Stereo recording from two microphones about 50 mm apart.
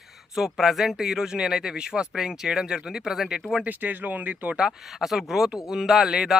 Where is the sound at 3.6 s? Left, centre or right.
Right.